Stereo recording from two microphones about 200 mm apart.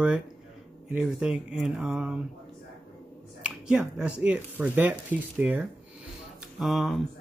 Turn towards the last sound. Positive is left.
turn(degrees=0)  # may be behind; listen again after turning